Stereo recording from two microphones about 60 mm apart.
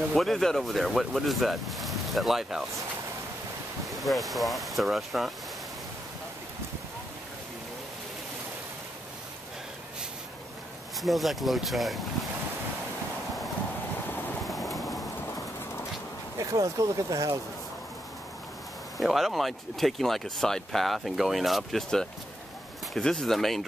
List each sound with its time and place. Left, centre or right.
0.1 s speech: centre
3.8 s speech: centre
11.0 s speech: centre
14.4 s a sound: centre
16.3 s speech: right
18.9 s speech: centre